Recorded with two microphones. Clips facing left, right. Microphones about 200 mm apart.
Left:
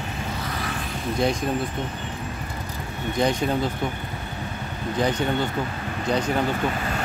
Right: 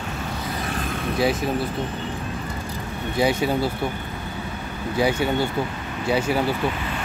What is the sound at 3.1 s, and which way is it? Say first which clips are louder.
Speech: right 2 dB; 5° right (ahead or behind).